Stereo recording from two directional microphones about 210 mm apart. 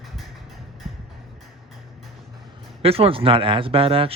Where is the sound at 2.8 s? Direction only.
25° right (ahead or behind).